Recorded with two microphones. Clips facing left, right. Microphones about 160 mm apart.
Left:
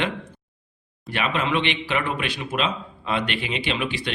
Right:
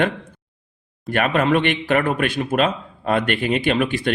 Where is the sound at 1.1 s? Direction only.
50° right (ahead or behind).